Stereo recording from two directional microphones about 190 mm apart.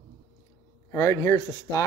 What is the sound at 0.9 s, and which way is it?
Speech, 15° left (ahead or behind).